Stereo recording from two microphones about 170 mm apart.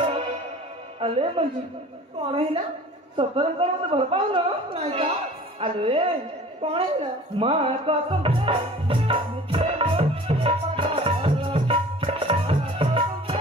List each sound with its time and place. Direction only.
1.0 s a woman's voice: 35° right (ahead or behind)
3.2 s a woman's voice: 35° right (ahead or behind)
6.6 s music: 35° right (ahead or behind)